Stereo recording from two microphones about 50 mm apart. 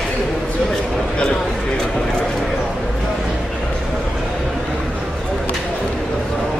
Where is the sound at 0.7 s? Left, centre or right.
Centre.